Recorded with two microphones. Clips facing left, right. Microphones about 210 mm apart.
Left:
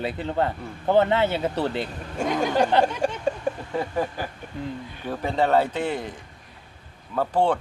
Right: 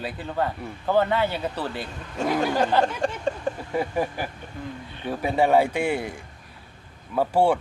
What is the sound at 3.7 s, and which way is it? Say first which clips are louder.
Speech: right 3 dB; 10° right (ahead or behind).